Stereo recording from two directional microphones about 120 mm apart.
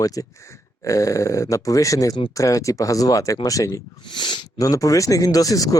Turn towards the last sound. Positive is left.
turn(degrees=30)  # may be behind; listen again after turning